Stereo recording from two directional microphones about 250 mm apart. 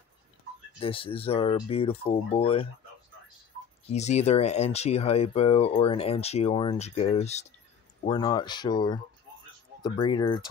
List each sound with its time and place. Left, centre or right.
0.7 s speech: left
3.9 s speech: left